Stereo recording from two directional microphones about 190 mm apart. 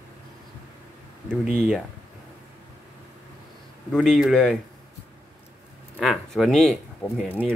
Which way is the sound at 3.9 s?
5° left (ahead or behind).